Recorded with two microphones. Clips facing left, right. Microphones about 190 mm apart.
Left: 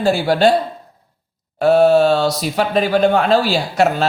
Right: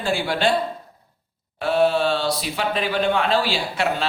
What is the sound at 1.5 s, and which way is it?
Speech, 45° left (ahead or behind).